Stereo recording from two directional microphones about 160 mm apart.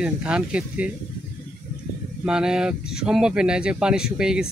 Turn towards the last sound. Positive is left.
turn(degrees=-5)  # may be behind; listen again after turning